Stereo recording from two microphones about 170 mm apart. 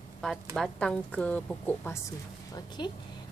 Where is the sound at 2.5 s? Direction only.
25° left (ahead or behind).